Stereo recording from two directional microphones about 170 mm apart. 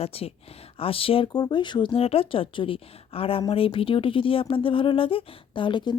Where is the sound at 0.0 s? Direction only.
35° left (ahead or behind).